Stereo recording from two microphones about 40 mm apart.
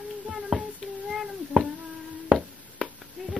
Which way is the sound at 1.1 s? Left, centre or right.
Centre.